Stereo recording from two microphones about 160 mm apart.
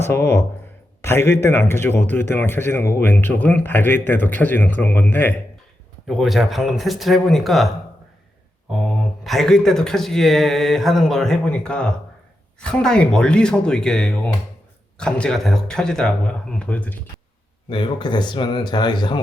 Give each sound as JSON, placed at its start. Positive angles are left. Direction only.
{"t": 0.0, "sound": "a man's voice", "side_deg": 15}
{"t": 6.1, "sound": "speech", "side_deg": 0}
{"t": 8.7, "sound": "speech", "side_deg": 0}
{"t": 17.7, "sound": "speech", "side_deg": 30}